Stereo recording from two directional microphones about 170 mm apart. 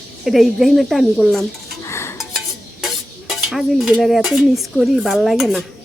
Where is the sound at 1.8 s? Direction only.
15° left (ahead or behind).